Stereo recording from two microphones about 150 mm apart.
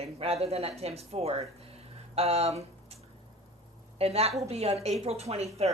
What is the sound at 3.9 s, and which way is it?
A woman's voice, 40° right (ahead or behind).